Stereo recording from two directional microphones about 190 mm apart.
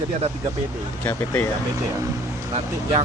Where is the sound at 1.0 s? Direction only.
10° left (ahead or behind).